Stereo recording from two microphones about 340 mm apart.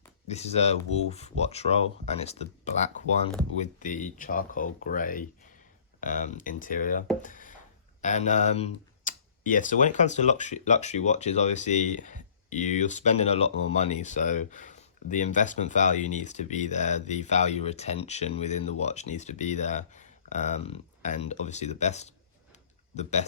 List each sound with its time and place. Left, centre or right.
0.3 s speech: centre